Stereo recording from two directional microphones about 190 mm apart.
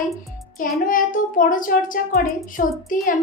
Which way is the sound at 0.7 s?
45° left (ahead or behind).